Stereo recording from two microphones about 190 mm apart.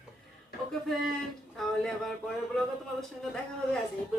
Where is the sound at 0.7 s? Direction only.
Centre (ahead or behind).